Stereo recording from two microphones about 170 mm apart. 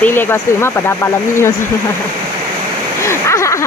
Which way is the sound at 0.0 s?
15° left (ahead or behind).